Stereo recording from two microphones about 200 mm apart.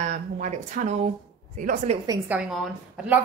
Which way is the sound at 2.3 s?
10° right (ahead or behind).